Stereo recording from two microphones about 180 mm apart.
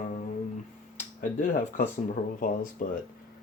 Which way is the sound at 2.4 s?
50° left (ahead or behind).